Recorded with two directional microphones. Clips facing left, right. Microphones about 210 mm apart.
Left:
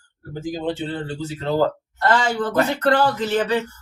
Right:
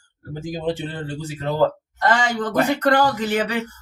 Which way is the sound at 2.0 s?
15° right (ahead or behind).